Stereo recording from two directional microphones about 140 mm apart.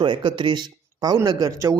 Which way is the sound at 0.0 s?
35° right (ahead or behind).